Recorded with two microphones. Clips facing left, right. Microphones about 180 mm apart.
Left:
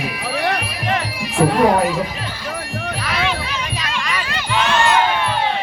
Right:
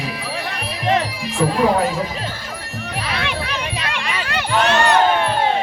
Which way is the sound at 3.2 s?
65° right (ahead or behind).